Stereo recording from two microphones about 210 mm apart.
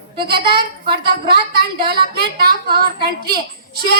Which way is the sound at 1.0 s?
50° right (ahead or behind).